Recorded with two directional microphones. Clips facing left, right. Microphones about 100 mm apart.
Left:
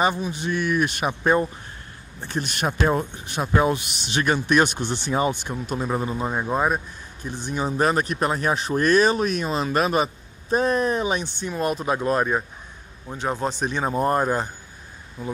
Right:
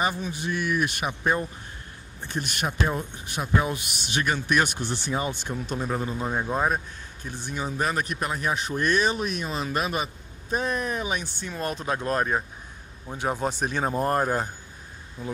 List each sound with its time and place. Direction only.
0.3 s a man's voice: 30° left (ahead or behind)
7.6 s a man's voice: 40° left (ahead or behind)
11.3 s speech: 15° left (ahead or behind)
13.2 s speech: 10° right (ahead or behind)
13.8 s speech: 5° left (ahead or behind)